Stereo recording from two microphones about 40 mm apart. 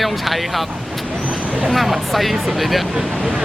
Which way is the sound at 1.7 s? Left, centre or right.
Centre.